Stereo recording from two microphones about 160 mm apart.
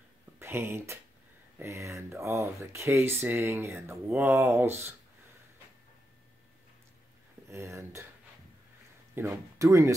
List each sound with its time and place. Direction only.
0.4 s speech: 15° right (ahead or behind)
7.4 s speech: 20° right (ahead or behind)
9.1 s speech: 15° right (ahead or behind)